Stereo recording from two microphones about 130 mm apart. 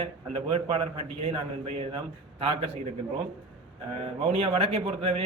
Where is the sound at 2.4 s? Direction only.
45° right (ahead or behind).